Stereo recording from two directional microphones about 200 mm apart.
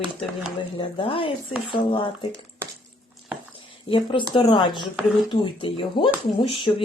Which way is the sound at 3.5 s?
25° left (ahead or behind).